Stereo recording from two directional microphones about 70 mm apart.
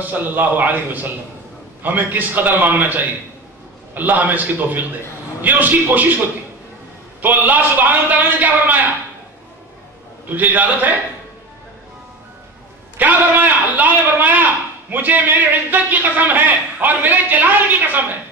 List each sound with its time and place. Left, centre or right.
0.0 s a man's voice: right
10.2 s a man's voice: right
12.9 s a man's voice: right